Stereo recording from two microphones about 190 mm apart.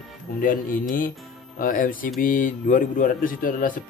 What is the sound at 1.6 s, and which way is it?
Speech, 45° left (ahead or behind).